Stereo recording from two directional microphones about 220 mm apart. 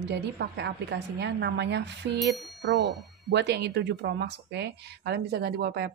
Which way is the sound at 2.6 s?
45° right (ahead or behind).